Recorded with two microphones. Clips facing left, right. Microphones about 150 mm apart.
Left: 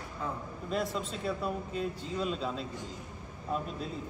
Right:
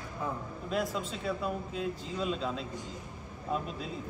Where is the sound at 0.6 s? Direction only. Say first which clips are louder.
Even; centre (ahead or behind).